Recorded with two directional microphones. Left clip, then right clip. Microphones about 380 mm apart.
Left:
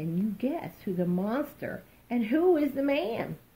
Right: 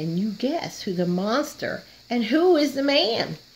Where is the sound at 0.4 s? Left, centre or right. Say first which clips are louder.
Right 7 dB; right.